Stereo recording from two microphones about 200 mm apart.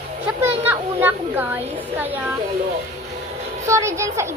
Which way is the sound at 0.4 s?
10° right (ahead or behind).